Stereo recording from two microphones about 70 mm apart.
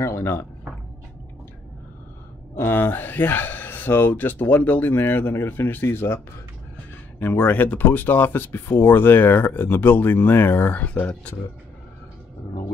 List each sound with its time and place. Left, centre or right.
0.0 s a sound: left
2.5 s speech: left
7.2 s speech: left